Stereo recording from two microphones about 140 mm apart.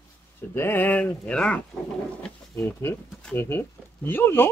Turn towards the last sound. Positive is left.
turn(degrees=15)  # may be behind; listen again after turning